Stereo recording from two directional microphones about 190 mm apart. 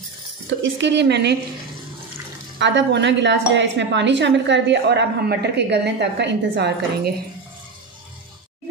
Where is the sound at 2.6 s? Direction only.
70° right (ahead or behind).